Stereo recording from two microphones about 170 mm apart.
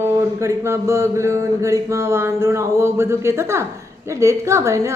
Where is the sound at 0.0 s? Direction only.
15° right (ahead or behind).